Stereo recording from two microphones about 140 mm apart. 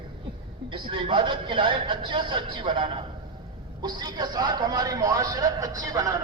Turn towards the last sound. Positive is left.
turn(degrees=-25)  # may be behind; listen again after turning